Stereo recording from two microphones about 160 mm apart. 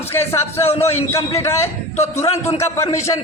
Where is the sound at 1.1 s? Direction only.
20° left (ahead or behind).